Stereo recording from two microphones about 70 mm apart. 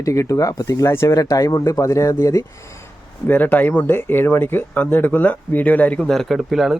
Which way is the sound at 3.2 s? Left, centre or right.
Left.